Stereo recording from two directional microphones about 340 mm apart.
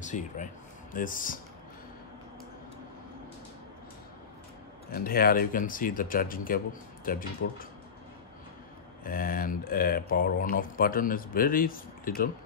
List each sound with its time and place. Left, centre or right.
0.0 s speech: left
4.9 s speech: left
9.0 s speech: left